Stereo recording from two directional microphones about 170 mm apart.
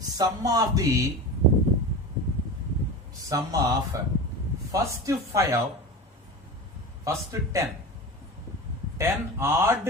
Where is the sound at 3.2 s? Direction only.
20° right (ahead or behind).